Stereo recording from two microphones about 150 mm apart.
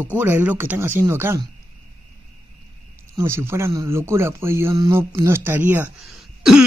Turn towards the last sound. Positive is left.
turn(degrees=-5)  # may be behind; listen again after turning